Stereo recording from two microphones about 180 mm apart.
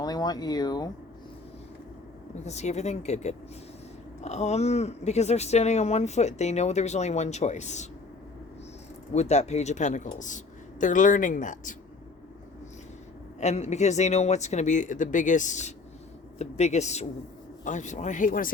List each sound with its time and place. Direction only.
0.0 s speech: 20° left (ahead or behind)
2.4 s speech: 40° left (ahead or behind)
9.1 s a man's voice: 40° left (ahead or behind)
13.4 s a man's voice: 40° left (ahead or behind)